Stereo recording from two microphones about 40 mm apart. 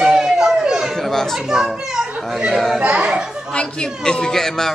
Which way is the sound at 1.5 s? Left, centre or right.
Centre.